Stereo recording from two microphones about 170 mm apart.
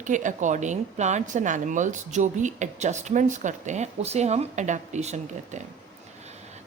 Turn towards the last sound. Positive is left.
turn(degrees=-40)  # may be behind; listen again after turning